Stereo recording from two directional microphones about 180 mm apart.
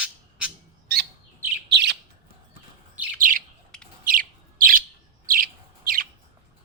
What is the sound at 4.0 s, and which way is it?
Bird, 50° right (ahead or behind).